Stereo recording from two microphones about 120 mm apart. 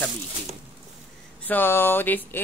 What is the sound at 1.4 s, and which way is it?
Speech, 15° left (ahead or behind).